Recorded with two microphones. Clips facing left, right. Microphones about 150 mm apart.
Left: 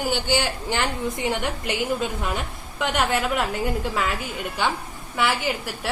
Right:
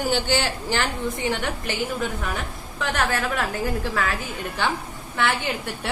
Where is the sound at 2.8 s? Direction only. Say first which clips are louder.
Left 2 dB; 20° left (ahead or behind).